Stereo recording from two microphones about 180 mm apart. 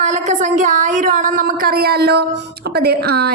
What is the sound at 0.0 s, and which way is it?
A woman's voice, 40° right (ahead or behind).